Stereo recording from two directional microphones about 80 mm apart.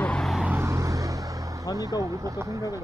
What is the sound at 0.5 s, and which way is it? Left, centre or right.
Vehicle, right.